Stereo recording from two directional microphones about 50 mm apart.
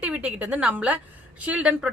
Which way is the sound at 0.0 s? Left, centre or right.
Right.